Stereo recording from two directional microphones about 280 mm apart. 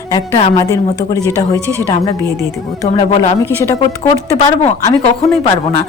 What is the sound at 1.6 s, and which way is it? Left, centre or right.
Speech, centre.